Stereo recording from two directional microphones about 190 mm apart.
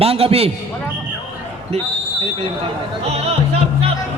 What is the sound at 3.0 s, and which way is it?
Speech, 30° right (ahead or behind).